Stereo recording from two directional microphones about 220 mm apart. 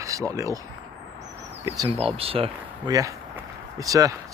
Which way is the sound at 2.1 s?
25° right (ahead or behind).